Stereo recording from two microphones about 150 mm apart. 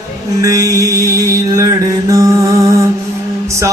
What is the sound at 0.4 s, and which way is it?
Mantra, 20° right (ahead or behind).